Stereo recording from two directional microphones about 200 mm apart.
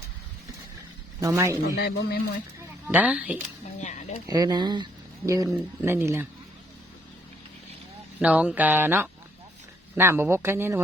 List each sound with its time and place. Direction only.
1.2 s speech: 15° right (ahead or behind)
1.7 s speech: 55° left (ahead or behind)
2.8 s speech: 5° right (ahead or behind)
4.3 s speech: 20° right (ahead or behind)
8.2 s speech: 5° right (ahead or behind)